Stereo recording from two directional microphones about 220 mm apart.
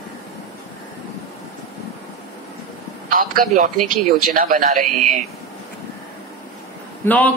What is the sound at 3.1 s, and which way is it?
Speech, 40° right (ahead or behind).